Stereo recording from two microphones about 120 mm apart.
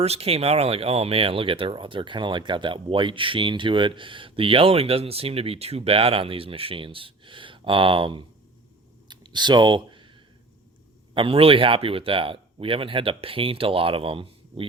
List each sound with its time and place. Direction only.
0.0 s speech: 60° right (ahead or behind)
9.0 s a sound: 40° right (ahead or behind)
11.1 s speech: 50° right (ahead or behind)